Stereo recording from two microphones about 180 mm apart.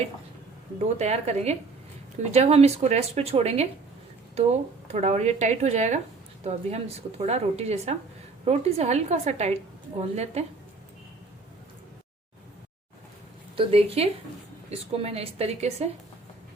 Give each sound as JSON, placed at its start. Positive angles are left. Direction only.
{"t": 0.8, "sound": "speech", "side_deg": -40}
{"t": 13.6, "sound": "speech", "side_deg": -35}